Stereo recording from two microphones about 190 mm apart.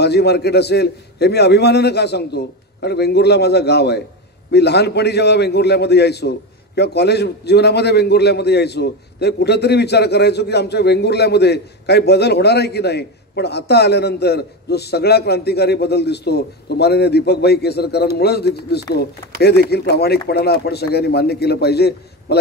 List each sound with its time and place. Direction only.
0.0 s a man's voice: 60° left (ahead or behind)